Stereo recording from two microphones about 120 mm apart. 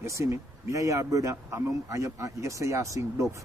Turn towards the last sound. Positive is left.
turn(degrees=-25)  # may be behind; listen again after turning